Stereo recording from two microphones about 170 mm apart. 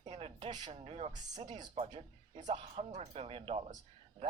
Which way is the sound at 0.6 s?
35° right (ahead or behind).